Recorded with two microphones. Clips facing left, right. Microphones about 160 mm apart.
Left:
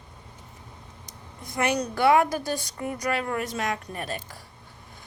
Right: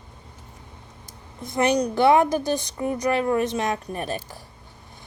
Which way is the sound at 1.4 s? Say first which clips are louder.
Right 5 dB; 25° right (ahead or behind).